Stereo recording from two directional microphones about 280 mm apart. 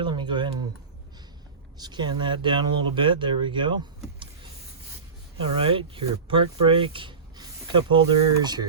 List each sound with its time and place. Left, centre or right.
0.0 s a sound: centre
1.8 s speech: centre
5.4 s speech: centre